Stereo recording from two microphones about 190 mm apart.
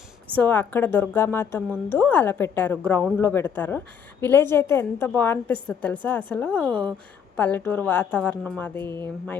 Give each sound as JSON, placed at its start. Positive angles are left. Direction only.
{"t": 0.3, "sound": "a woman's voice", "side_deg": 10}
{"t": 6.7, "sound": "speech", "side_deg": -25}
{"t": 7.3, "sound": "a woman's voice", "side_deg": 10}